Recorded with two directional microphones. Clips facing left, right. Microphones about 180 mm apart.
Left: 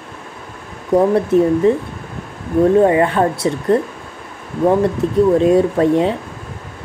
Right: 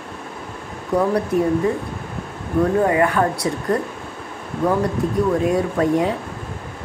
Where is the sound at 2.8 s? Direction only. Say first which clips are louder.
Left 4 dB; 25° left (ahead or behind).